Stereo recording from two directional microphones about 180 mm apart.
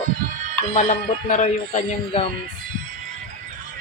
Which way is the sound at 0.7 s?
45° left (ahead or behind).